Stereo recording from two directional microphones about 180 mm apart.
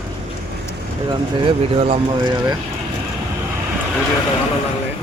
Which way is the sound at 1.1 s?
30° right (ahead or behind).